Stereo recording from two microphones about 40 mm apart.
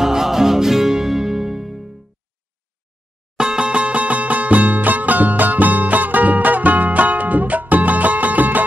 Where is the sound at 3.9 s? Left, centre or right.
Right.